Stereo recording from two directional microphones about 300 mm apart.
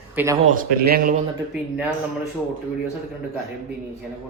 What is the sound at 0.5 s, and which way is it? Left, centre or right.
Speech, right.